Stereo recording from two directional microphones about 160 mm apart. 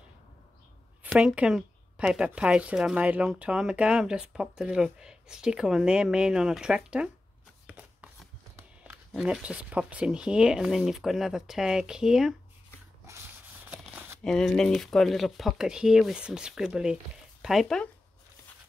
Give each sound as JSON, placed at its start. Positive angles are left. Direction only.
{"t": 1.0, "sound": "speech", "side_deg": -5}
{"t": 7.6, "sound": "shuffling cards", "side_deg": -10}
{"t": 9.1, "sound": "speech", "side_deg": -5}
{"t": 13.7, "sound": "crumpling", "side_deg": -10}
{"t": 14.2, "sound": "speech", "side_deg": 5}